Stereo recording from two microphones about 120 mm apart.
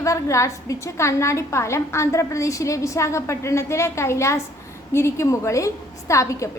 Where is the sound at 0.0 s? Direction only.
25° left (ahead or behind).